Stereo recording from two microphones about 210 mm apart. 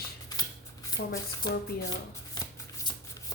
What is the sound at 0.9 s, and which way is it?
Speech, 60° left (ahead or behind).